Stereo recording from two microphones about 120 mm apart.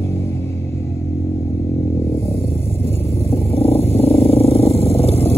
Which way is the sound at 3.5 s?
55° left (ahead or behind).